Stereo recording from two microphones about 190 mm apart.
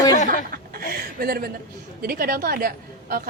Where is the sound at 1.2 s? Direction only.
55° right (ahead or behind).